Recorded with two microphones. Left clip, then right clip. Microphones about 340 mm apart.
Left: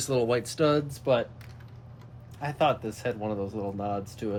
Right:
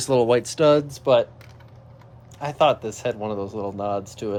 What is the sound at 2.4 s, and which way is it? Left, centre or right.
Speech, right.